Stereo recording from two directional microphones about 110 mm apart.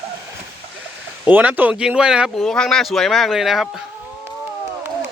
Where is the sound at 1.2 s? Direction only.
15° right (ahead or behind).